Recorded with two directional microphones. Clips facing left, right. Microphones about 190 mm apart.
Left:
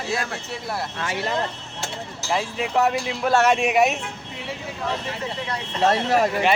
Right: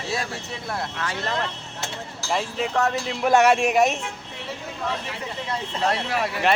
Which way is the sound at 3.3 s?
15° right (ahead or behind).